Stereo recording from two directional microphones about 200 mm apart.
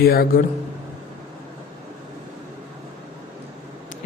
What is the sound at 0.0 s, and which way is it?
Speech, 50° left (ahead or behind).